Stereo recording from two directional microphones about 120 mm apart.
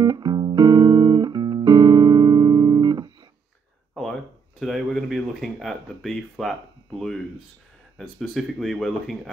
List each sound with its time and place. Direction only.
0.0 s music: 35° right (ahead or behind)
3.9 s a sound: 5° left (ahead or behind)
8.0 s speech: centre (ahead or behind)